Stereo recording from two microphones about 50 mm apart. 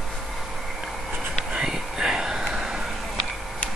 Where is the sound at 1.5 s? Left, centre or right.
Centre.